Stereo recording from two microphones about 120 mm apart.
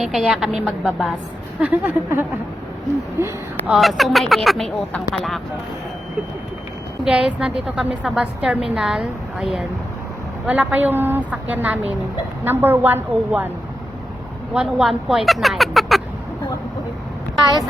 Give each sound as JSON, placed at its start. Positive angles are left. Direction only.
{"t": 0.0, "sound": "speech", "side_deg": -5}
{"t": 1.6, "sound": "a woman's voice", "side_deg": -15}
{"t": 3.7, "sound": "speech", "side_deg": 0}
{"t": 7.0, "sound": "a woman's voice", "side_deg": -5}
{"t": 14.5, "sound": "speech", "side_deg": -5}